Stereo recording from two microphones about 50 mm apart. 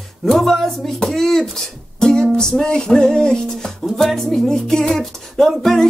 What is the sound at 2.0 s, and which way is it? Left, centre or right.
Music, centre.